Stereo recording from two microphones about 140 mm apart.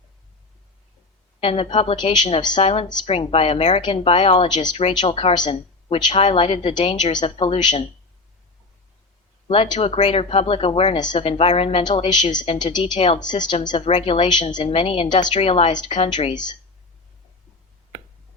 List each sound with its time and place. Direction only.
1.4 s a woman's voice: 40° left (ahead or behind)
9.5 s speech: 40° left (ahead or behind)
10.9 s speech: 30° left (ahead or behind)
15.3 s speech: 45° left (ahead or behind)